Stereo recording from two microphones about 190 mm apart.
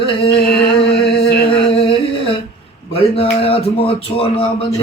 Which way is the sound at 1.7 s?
30° left (ahead or behind).